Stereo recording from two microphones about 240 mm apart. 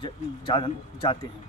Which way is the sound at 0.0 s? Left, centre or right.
Left.